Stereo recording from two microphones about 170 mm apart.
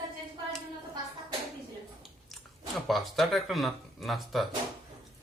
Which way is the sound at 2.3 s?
Centre (ahead or behind).